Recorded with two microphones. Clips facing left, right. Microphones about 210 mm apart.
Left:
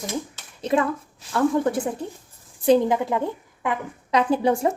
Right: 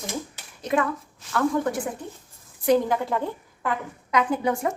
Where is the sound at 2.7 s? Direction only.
20° left (ahead or behind).